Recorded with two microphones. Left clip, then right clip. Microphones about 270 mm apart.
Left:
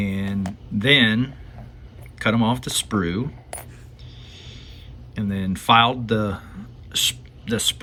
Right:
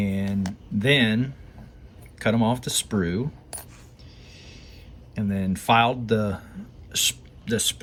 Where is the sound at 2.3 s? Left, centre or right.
Centre.